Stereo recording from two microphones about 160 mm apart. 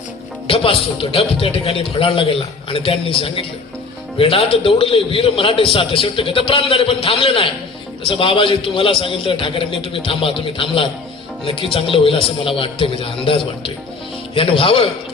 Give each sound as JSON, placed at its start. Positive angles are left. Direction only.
{"t": 0.4, "sound": "a man's voice", "side_deg": 35}